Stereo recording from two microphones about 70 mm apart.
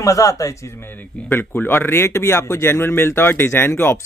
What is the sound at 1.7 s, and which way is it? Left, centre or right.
Speech, left.